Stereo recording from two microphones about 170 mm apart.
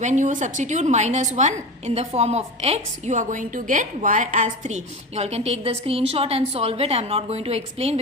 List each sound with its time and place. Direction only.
0.0 s a woman's voice: 45° right (ahead or behind)